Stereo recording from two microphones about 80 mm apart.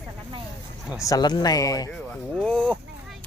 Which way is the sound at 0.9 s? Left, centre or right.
Left.